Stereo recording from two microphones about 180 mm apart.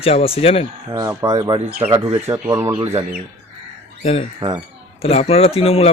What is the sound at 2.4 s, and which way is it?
Speech, 15° right (ahead or behind).